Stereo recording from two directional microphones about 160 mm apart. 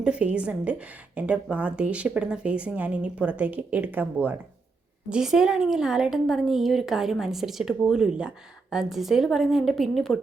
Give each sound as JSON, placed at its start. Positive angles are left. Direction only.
{"t": 0.0, "sound": "a woman's voice", "side_deg": -5}